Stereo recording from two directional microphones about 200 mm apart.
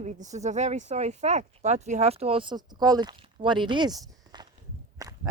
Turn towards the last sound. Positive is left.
turn(degrees=-15)  # may be behind; listen again after turning